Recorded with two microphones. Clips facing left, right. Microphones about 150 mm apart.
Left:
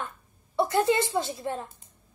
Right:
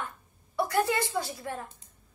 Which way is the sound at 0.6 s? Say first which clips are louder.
Left 4 dB; 20° left (ahead or behind).